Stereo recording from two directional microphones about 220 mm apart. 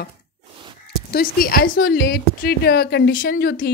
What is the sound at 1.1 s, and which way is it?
A woman's voice, 40° left (ahead or behind).